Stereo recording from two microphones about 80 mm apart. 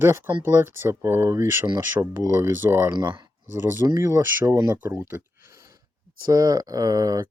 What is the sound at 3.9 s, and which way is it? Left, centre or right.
Speech, right.